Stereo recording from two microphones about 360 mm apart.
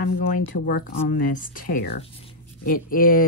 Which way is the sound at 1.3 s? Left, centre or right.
Left.